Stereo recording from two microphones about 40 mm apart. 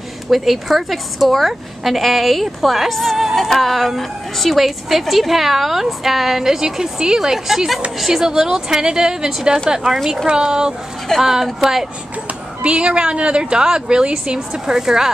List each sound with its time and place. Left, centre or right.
0.3 s a woman's voice: centre
12.6 s a woman's voice: right